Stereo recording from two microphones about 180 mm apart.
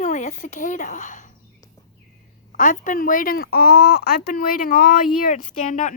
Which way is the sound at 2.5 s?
45° left (ahead or behind).